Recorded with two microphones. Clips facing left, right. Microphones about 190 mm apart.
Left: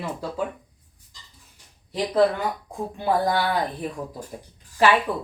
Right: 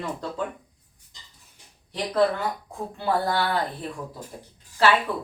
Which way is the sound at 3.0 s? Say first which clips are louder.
Left 2 dB; 15° left (ahead or behind).